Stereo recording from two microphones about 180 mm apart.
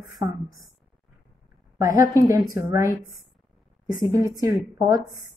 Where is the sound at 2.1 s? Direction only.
20° right (ahead or behind).